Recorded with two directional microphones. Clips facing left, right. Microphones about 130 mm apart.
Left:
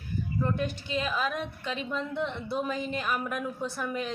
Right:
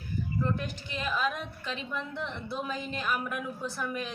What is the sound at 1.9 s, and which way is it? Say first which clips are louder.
A woman's voice: left 6 dB; 20° left (ahead or behind).